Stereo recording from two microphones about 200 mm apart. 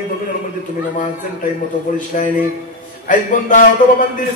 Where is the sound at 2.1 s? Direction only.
40° left (ahead or behind).